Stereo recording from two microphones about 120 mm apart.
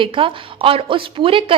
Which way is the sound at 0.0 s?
50° right (ahead or behind).